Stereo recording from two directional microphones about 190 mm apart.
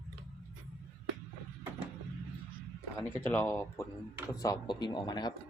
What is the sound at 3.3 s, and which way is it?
A man's voice, 10° left (ahead or behind).